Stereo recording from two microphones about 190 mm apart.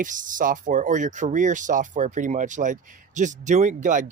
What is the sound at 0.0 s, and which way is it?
Speech, 45° right (ahead or behind).